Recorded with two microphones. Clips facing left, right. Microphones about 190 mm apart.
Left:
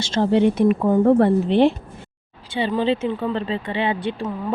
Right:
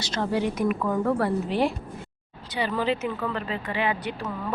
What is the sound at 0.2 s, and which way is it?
Speech, 25° left (ahead or behind).